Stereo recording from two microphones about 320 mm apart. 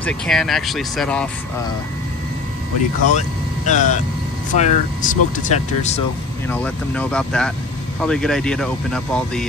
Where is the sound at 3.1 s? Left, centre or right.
Left.